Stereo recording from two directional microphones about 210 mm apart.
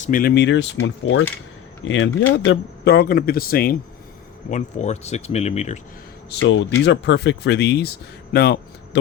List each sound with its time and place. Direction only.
0.0 s speech: 40° left (ahead or behind)
4.5 s speech: 30° left (ahead or behind)
6.4 s speech: 65° left (ahead or behind)